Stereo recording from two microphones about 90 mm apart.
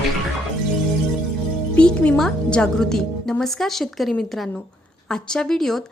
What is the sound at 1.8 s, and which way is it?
A woman's voice, 10° left (ahead or behind).